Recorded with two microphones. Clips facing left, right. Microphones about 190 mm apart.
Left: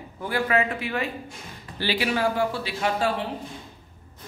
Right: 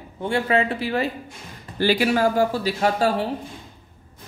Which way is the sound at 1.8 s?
45° right (ahead or behind).